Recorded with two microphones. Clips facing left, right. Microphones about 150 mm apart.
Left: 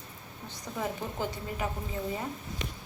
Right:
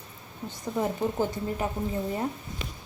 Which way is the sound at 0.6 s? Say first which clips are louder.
Right 7 dB; 25° right (ahead or behind).